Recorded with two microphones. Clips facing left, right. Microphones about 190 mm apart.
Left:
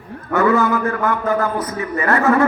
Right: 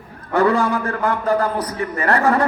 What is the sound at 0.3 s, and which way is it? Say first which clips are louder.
A man's voice: left 1 dB; 35° right (ahead or behind).